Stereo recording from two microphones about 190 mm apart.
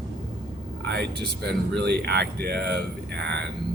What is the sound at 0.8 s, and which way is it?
Speech, 60° right (ahead or behind).